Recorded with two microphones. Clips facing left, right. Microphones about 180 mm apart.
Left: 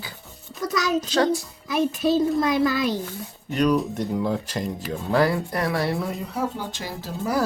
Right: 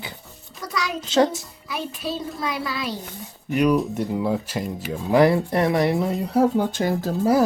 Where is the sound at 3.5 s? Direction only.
10° right (ahead or behind).